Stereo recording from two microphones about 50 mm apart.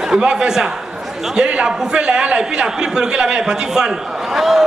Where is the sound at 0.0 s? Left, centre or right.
Centre.